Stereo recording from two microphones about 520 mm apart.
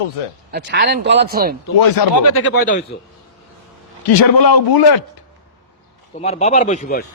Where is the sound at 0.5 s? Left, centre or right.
Centre.